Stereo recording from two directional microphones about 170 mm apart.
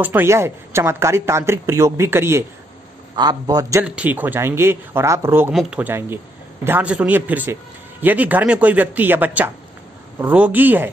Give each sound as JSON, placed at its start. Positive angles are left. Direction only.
{"t": 0.0, "sound": "a man's voice", "side_deg": -10}
{"t": 3.8, "sound": "speech", "side_deg": -10}